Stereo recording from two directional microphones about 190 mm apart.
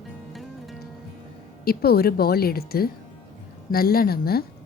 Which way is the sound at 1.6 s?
55° left (ahead or behind).